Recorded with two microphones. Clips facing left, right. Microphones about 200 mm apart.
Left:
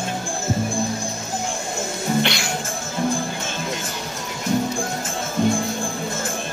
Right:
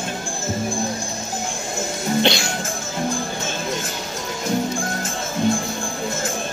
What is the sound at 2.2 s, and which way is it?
Music, 25° right (ahead or behind).